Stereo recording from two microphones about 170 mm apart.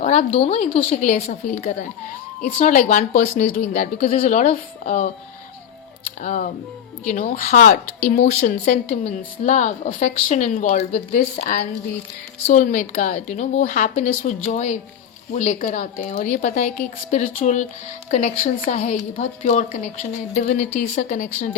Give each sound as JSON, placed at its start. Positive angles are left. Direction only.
{"t": 0.0, "sound": "a sound", "side_deg": 40}
{"t": 0.3, "sound": "speech", "side_deg": 40}
{"t": 1.0, "sound": "a woman's voice", "side_deg": 50}
{"t": 6.2, "sound": "a woman's voice", "side_deg": 50}